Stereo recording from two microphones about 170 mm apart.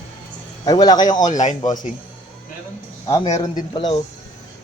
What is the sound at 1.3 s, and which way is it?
Speech, 45° left (ahead or behind).